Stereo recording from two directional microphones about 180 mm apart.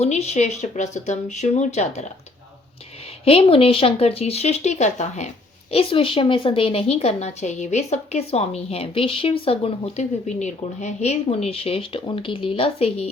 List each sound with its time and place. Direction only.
0.0 s a woman's voice: 35° left (ahead or behind)
3.2 s a woman's voice: 30° left (ahead or behind)